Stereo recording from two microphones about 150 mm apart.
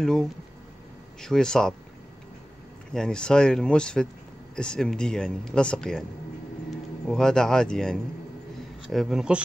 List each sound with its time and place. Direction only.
0.0 s speech: 5° left (ahead or behind)
2.9 s speech: 5° left (ahead or behind)